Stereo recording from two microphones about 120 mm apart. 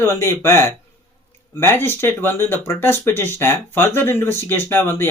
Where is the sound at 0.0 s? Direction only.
20° left (ahead or behind).